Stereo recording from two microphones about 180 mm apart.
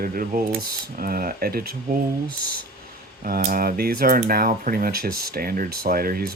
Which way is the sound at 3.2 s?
55° right (ahead or behind).